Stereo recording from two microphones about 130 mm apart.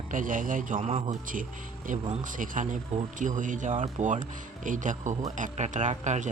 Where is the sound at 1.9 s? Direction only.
90° right.